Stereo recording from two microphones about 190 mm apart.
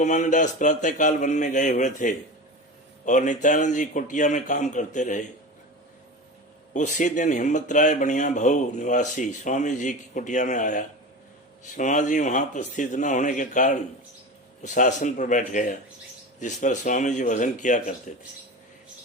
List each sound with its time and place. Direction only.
0.0 s speech: 40° left (ahead or behind)
6.7 s speech: 40° left (ahead or behind)